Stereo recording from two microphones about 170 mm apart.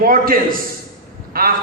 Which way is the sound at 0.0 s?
55° right (ahead or behind).